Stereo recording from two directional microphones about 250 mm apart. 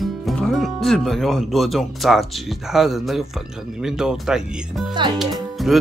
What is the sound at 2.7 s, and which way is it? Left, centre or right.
Speech, centre.